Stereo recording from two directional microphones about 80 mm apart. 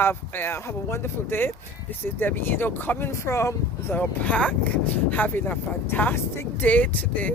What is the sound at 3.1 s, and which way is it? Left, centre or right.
Speech, left.